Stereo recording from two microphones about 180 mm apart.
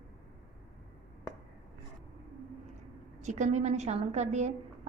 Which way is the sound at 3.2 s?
40° right (ahead or behind).